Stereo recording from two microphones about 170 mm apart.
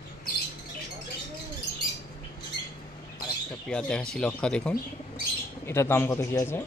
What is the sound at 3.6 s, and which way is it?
Speech, 5° left (ahead or behind).